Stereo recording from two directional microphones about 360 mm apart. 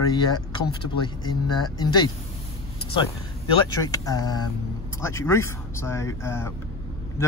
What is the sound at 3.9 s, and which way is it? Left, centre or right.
Speech, centre.